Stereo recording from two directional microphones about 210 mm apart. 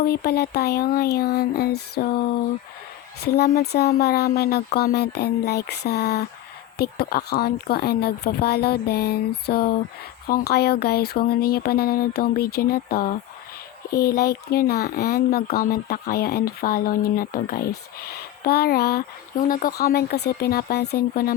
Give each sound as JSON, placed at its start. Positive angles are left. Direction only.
{"t": 0.0, "sound": "speech", "side_deg": 50}
{"t": 3.2, "sound": "speech", "side_deg": 50}